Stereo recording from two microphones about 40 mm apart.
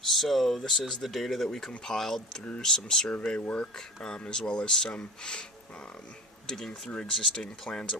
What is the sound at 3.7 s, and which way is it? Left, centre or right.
Speech, centre.